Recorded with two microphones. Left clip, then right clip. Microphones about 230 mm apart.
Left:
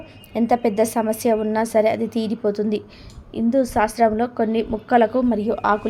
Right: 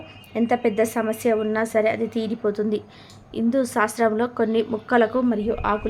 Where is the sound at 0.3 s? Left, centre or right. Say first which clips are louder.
Left 2 dB; centre.